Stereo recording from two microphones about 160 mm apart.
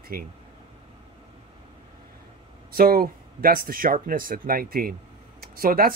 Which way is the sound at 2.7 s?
70° right (ahead or behind).